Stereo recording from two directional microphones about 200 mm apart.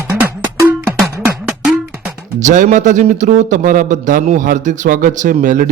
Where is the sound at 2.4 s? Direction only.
40° right (ahead or behind).